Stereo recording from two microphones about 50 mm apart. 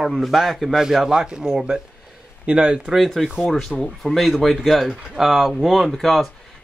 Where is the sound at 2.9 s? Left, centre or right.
Centre.